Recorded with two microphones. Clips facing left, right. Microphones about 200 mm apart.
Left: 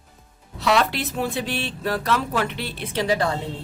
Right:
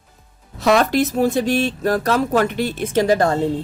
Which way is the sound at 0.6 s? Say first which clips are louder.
Right 6 dB; 45° right (ahead or behind).